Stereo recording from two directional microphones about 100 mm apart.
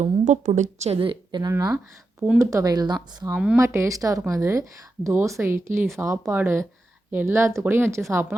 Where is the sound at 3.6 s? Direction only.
25° right (ahead or behind).